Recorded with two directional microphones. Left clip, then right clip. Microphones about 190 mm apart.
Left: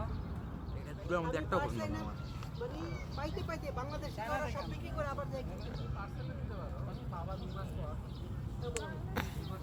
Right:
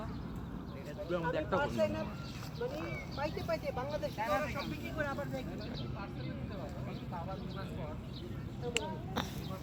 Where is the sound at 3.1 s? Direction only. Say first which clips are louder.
Right 5 dB; 10° left (ahead or behind).